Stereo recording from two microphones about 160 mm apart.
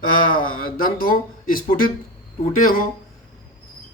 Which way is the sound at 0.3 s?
65° left (ahead or behind).